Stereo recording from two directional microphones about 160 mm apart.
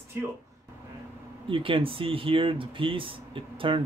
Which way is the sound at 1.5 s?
35° right (ahead or behind).